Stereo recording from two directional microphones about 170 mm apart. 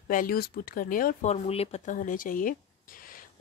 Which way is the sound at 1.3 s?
35° left (ahead or behind).